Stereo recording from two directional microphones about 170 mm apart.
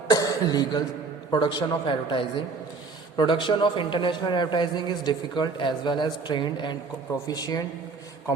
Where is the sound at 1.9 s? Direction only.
30° left (ahead or behind).